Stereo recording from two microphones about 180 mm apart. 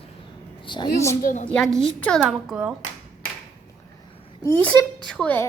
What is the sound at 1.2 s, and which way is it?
Speech, 45° left (ahead or behind).